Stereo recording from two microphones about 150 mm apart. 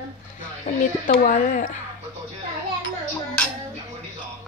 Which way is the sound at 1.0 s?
60° left (ahead or behind).